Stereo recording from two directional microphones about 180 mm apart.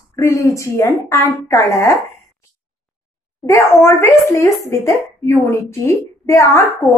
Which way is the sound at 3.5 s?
15° left (ahead or behind).